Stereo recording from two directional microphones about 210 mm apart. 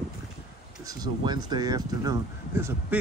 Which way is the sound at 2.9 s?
5° right (ahead or behind).